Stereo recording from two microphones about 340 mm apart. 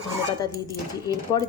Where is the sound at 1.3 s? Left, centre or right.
Centre.